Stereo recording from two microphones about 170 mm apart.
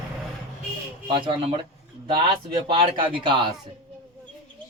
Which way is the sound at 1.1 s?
30° right (ahead or behind).